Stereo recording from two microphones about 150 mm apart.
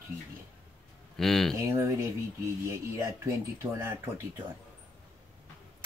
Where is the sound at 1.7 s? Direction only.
20° right (ahead or behind).